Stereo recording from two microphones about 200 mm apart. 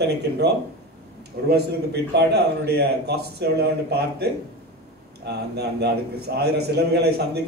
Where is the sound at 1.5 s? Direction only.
55° right (ahead or behind).